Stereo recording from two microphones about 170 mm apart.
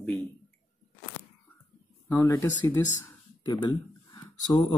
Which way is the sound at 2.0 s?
15° left (ahead or behind).